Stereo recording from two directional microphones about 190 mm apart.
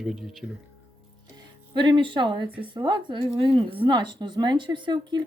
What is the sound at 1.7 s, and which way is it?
Speech, 25° right (ahead or behind).